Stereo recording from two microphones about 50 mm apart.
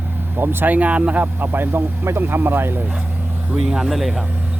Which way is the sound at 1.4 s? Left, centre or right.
Right.